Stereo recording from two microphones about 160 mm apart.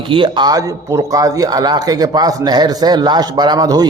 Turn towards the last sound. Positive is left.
turn(degrees=-25)  # may be behind; listen again after turning